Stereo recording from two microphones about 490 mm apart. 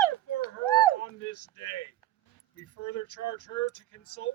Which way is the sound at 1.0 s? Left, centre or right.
Left.